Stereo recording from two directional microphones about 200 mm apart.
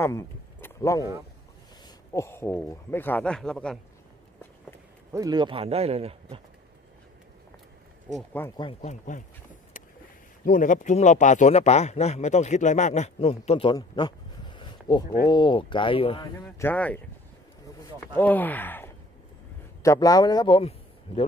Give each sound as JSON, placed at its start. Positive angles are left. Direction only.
{"t": 0.0, "sound": "a sound", "side_deg": 15}
{"t": 2.1, "sound": "speech", "side_deg": 10}
{"t": 5.1, "sound": "a man's voice", "side_deg": -20}
{"t": 8.3, "sound": "speech", "side_deg": 10}
{"t": 8.5, "sound": "speech", "side_deg": 25}
{"t": 10.4, "sound": "speech", "side_deg": 40}
{"t": 16.3, "sound": "speech", "side_deg": 10}
{"t": 18.1, "sound": "a man's voice", "side_deg": 10}